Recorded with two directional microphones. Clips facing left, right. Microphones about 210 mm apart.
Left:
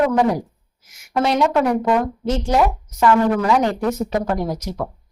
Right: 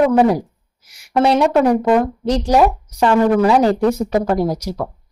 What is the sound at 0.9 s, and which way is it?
A woman's voice, 30° right (ahead or behind).